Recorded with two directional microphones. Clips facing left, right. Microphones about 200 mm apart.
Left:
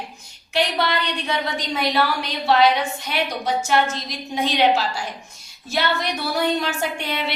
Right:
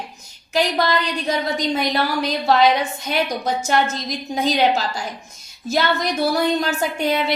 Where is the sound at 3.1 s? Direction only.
40° right (ahead or behind).